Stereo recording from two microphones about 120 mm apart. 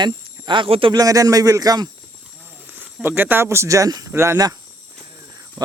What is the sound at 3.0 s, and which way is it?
Speech, 15° right (ahead or behind).